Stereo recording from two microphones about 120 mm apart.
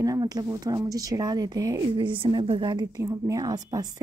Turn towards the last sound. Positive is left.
turn(degrees=-30)  # may be behind; listen again after turning